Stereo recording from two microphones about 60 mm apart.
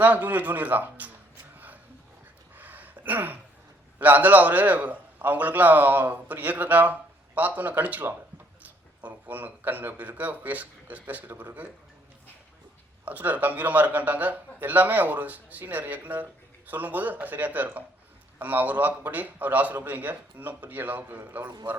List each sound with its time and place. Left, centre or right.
0.0 s a man's voice: right
1.5 s a sound: right
4.0 s a man's voice: right
13.1 s a man's voice: right